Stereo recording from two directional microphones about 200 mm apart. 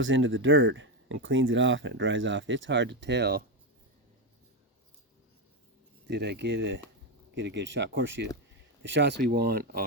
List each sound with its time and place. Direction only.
0.0 s speech: 70° right (ahead or behind); by 3.4 s 55° right (ahead or behind)
6.1 s speech: 55° right (ahead or behind)